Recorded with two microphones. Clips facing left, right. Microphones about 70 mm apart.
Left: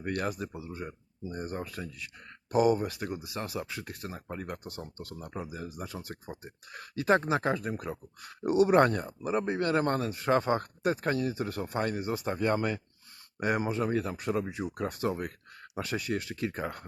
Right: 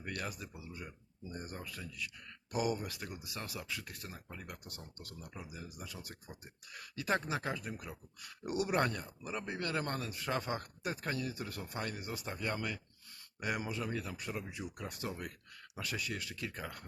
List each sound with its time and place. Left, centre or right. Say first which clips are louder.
0.0 s speech: left 10 dB; left
15.7 s speech: left 8 dB; left